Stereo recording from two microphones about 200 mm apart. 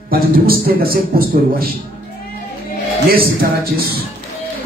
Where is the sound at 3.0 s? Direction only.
50° right (ahead or behind).